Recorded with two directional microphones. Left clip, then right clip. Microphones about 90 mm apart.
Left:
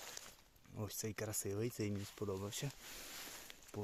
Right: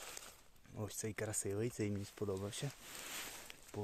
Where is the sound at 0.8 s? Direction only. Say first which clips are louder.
Right 1 dB; 5° right (ahead or behind).